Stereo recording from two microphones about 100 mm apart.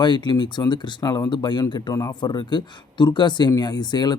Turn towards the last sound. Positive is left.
turn(degrees=45)  # may be behind; listen again after turning